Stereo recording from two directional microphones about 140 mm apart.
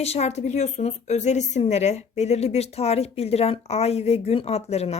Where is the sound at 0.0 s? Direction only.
50° left (ahead or behind).